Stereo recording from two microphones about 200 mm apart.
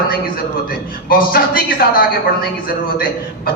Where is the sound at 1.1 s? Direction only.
50° left (ahead or behind).